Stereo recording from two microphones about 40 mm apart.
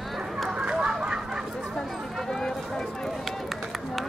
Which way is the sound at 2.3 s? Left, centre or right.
Centre.